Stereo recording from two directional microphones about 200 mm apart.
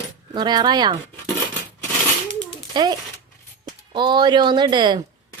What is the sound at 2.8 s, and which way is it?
Speech, 20° right (ahead or behind).